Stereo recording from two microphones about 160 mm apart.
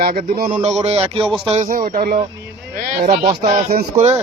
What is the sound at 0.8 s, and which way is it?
Speech, 40° right (ahead or behind).